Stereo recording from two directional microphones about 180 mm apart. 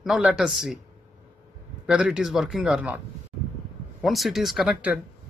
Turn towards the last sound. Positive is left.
turn(degrees=-5)  # may be behind; listen again after turning